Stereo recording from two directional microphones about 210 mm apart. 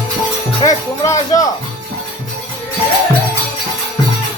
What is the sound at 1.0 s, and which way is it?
Speech, 15° left (ahead or behind).